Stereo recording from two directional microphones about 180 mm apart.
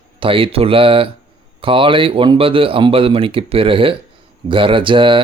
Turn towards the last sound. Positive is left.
turn(degrees=-30)  # may be behind; listen again after turning